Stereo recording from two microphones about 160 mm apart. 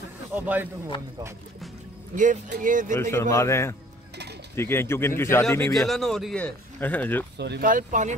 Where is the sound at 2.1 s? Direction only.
50° right (ahead or behind).